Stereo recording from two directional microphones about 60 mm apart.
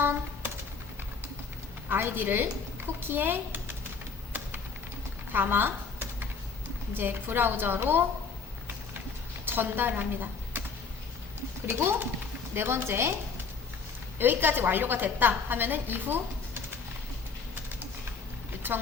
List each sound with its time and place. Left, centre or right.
0.0 s music: right
1.9 s speech: right
4.3 s typing: right
5.3 s computer keyboard: right
6.9 s a woman's voice: right
9.5 s speech: right
11.6 s a woman's voice: right
14.2 s a woman's voice: right
18.6 s a woman's voice: right